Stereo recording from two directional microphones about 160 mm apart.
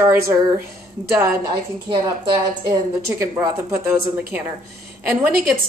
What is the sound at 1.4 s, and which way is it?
A woman's voice, 25° right (ahead or behind).